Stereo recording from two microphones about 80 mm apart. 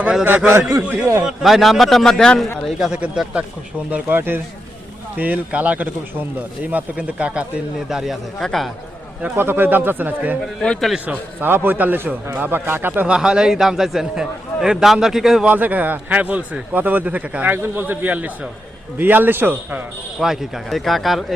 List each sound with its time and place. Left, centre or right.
0.0 s a man's voice: centre
0.3 s a man's voice: right
1.2 s a man's voice: centre
2.6 s a man's voice: centre
3.0 s a man's voice: centre
7.9 s a man's voice: centre
9.2 s a man's voice: right
10.4 s a man's voice: centre
11.0 s a man's voice: right
12.9 s a man's voice: centre
15.4 s a man's voice: right
20.1 s a man's voice: centre